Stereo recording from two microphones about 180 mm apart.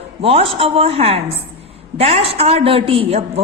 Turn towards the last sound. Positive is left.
turn(degrees=-30)  # may be behind; listen again after turning